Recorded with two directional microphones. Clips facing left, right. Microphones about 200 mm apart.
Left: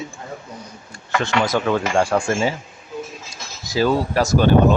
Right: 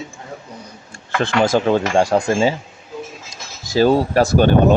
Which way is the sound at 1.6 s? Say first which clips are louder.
Right 3 dB; 30° right (ahead or behind).